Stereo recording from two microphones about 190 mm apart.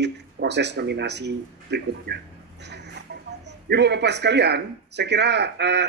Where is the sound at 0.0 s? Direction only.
65° right (ahead or behind).